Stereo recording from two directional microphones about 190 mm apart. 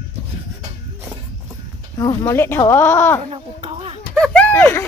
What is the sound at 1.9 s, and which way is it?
Speech, 20° left (ahead or behind).